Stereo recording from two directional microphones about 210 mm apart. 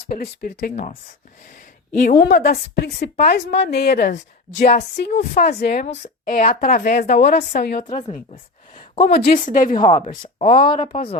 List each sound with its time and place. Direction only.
0.1 s a woman's voice: 45° left (ahead or behind)
4.9 s a woman's voice: 55° left (ahead or behind)
5.3 s speech: 35° left (ahead or behind)
5.5 s a woman's voice: 50° left (ahead or behind)
5.8 s a woman's voice: 35° left (ahead or behind)
7.2 s speech: 30° left (ahead or behind)
7.5 s a woman's voice: 45° left (ahead or behind)
9.0 s speech: 45° left (ahead or behind)
9.7 s speech: 20° left (ahead or behind)